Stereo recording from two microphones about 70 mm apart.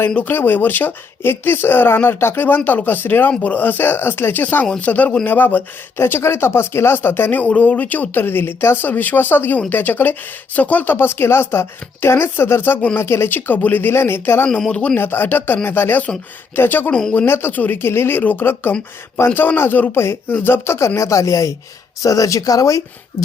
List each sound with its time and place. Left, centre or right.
0.3 s speech: left
13.0 s speech: left
14.7 s speech: centre
14.9 s speech: left
16.9 s speech: centre
17.2 s speech: left
20.0 s speech: left